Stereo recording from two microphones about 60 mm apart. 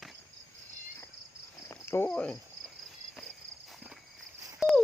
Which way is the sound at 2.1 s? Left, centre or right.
Left.